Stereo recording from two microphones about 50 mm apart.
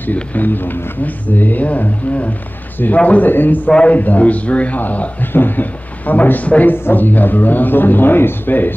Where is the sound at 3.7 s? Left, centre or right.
Left.